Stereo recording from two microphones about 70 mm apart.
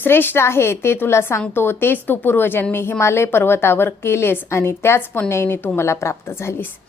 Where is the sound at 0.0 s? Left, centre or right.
Left.